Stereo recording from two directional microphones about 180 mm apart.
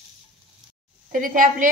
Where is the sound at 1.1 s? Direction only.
50° right (ahead or behind).